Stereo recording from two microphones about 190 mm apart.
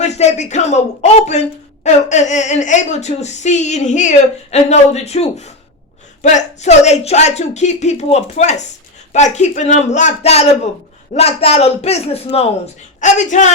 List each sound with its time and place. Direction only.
0.0 s a woman's voice: 40° left (ahead or behind)